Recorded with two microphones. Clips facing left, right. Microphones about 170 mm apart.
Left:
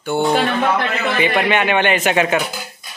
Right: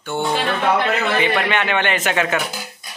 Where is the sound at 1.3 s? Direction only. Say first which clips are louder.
Left 3 dB; 15° left (ahead or behind).